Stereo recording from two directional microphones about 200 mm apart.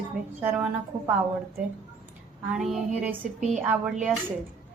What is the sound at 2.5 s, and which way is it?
Speech, 5° right (ahead or behind).